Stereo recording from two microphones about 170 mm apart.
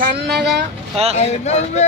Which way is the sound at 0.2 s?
75° right (ahead or behind).